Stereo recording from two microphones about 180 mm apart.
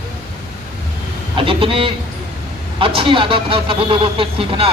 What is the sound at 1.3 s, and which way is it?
A man's voice, 30° right (ahead or behind).